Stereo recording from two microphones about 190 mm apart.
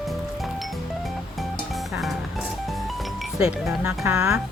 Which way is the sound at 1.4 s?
Centre (ahead or behind).